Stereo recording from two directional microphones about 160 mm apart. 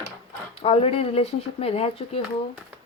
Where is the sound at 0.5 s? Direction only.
35° left (ahead or behind).